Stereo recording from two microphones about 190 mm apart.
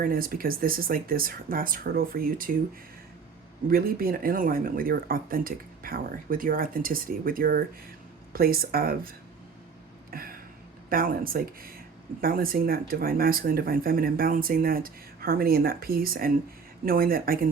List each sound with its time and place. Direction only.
0.0 s speech: 50° right (ahead or behind)
3.7 s speech: 50° right (ahead or behind)